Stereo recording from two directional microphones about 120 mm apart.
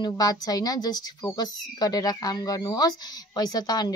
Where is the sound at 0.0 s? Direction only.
30° left (ahead or behind).